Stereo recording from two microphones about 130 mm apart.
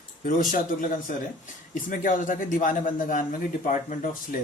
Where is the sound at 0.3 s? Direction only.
90° left.